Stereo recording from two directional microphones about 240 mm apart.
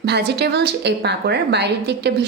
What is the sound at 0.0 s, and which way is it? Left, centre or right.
A woman's voice, right.